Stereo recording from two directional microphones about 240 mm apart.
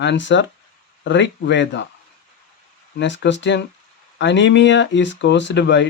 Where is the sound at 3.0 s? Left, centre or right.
Left.